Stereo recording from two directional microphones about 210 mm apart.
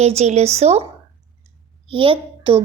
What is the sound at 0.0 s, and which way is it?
Speech, 30° right (ahead or behind).